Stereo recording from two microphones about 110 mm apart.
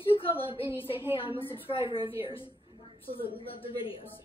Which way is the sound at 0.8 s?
55° left (ahead or behind).